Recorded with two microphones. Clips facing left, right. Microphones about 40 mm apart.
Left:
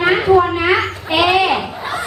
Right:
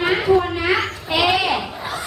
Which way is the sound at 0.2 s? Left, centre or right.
Centre.